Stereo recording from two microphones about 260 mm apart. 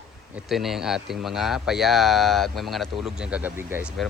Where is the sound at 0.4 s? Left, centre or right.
Centre.